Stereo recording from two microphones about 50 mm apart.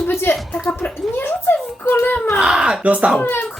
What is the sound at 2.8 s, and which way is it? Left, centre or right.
Speech, right.